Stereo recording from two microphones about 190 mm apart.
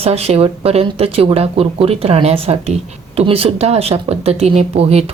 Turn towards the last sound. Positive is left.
turn(degrees=-35)  # may be behind; listen again after turning